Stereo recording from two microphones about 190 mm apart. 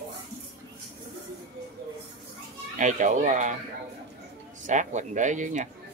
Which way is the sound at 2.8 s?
40° right (ahead or behind).